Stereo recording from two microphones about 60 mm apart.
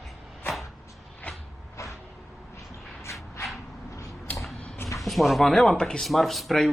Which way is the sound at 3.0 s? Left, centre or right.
Left.